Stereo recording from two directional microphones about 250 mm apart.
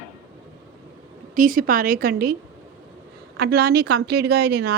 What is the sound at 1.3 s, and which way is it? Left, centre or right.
A woman's voice, right.